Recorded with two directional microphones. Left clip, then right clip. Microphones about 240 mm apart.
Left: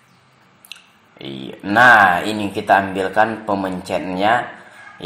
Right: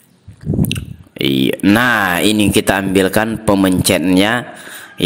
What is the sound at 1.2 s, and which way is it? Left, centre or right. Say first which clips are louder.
Speech: right 16 dB; right.